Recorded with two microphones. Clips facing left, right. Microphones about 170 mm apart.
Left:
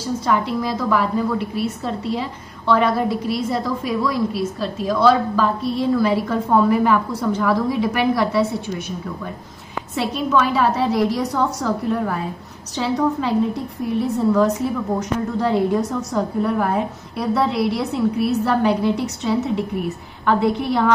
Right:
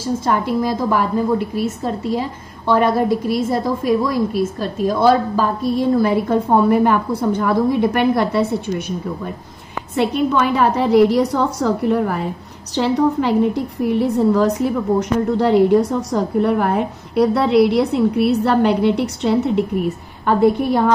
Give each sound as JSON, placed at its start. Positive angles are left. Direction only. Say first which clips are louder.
{"t": 0.0, "sound": "a woman's voice", "louder": "right 2 dB", "side_deg": -45}
{"t": 9.9, "sound": "a woman's voice", "louder": "right 3 dB", "side_deg": -55}
{"t": 15.8, "sound": "a woman's voice", "louder": "right 3 dB", "side_deg": -35}
{"t": 16.3, "sound": "a woman's voice", "louder": "right 4 dB", "side_deg": -65}